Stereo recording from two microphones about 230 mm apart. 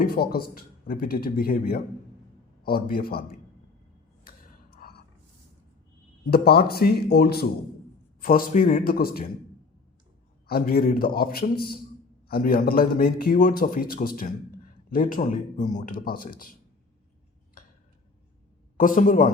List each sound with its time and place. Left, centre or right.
0.0 s speech: left
4.2 s gasp: left
6.3 s speech: left
10.4 s speech: left
18.8 s speech: left